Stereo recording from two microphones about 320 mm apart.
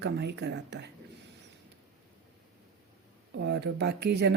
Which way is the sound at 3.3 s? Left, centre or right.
Right.